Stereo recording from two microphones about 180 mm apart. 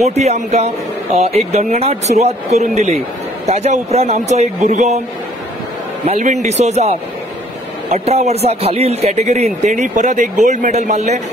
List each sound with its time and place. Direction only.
0.0 s speech: 40° right (ahead or behind)
6.0 s speech: 40° right (ahead or behind)